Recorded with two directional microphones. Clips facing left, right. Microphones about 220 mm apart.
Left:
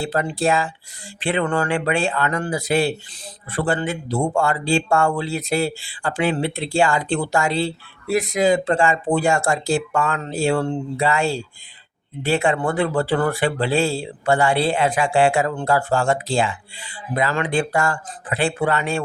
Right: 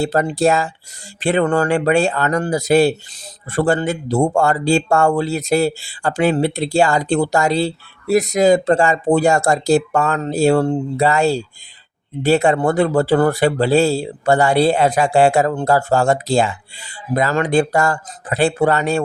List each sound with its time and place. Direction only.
0.0 s speech: 40° right (ahead or behind)